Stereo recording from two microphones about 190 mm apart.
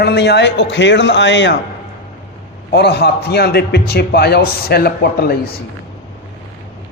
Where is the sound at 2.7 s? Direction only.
60° left (ahead or behind).